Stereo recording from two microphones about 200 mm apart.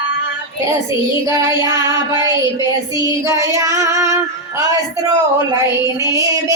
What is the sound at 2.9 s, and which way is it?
Child singing, 15° right (ahead or behind).